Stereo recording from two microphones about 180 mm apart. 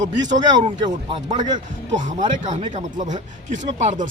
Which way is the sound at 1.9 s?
45° right (ahead or behind).